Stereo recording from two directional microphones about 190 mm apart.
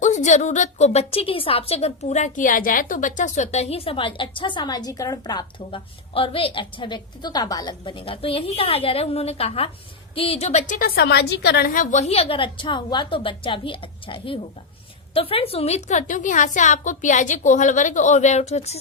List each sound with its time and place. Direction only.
0.0 s a woman's voice: 40° left (ahead or behind)